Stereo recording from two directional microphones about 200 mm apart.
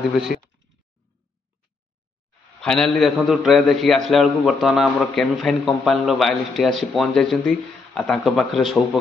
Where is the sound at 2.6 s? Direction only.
5° left (ahead or behind).